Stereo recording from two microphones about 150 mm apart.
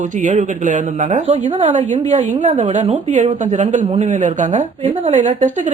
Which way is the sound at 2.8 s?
50° right (ahead or behind).